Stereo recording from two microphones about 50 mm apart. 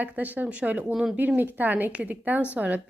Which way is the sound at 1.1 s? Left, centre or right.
Right.